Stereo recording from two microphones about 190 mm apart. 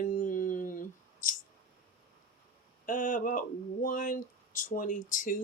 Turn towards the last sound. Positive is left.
turn(degrees=45)  # may be behind; listen again after turning